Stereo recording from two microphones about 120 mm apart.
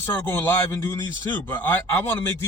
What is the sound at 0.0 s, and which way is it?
A man's voice, 20° left (ahead or behind).